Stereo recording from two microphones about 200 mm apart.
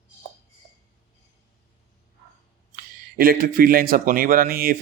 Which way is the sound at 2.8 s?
45° right (ahead or behind).